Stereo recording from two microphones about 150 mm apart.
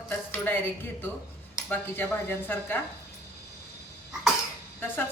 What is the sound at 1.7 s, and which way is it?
A woman's voice, 15° left (ahead or behind).